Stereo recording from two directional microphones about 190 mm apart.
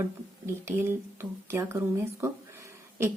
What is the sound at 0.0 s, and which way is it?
Speech, 15° right (ahead or behind).